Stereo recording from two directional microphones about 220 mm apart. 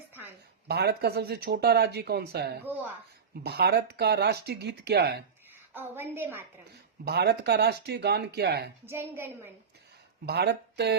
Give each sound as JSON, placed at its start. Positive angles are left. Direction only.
{"t": 0.7, "sound": "speech", "side_deg": -50}
{"t": 5.9, "sound": "a woman's voice", "side_deg": -10}
{"t": 7.0, "sound": "speech", "side_deg": -50}
{"t": 8.9, "sound": "a woman's voice", "side_deg": -10}
{"t": 10.2, "sound": "speech", "side_deg": -50}